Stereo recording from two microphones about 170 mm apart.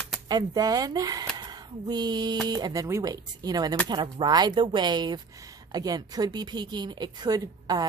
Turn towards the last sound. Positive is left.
turn(degrees=-20)  # may be behind; listen again after turning